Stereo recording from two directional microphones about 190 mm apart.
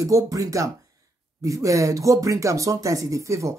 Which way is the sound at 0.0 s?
20° right (ahead or behind).